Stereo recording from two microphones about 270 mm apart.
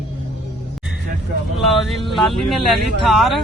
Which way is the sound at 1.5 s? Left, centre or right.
Centre.